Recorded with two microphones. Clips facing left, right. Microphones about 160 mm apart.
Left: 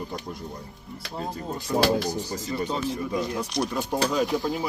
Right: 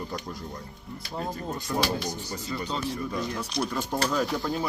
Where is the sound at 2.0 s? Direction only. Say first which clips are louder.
Left 4 dB; 35° left (ahead or behind).